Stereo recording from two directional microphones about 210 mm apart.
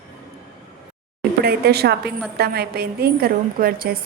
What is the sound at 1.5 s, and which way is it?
A woman's voice, 50° right (ahead or behind).